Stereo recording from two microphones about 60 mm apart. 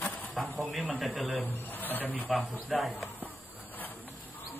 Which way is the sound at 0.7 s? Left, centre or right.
Centre.